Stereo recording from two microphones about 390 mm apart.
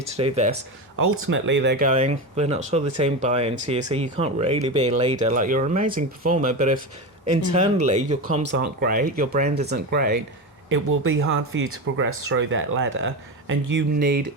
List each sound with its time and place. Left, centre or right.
0.0 s speech: centre
0.9 s speech: right